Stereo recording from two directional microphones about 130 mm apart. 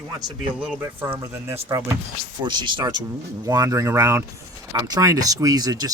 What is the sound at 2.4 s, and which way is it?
Speech, 35° right (ahead or behind).